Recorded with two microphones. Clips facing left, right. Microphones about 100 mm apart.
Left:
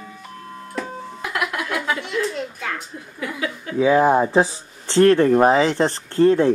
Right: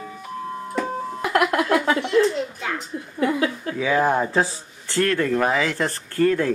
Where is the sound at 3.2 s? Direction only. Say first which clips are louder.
Right 6 dB; 40° right (ahead or behind).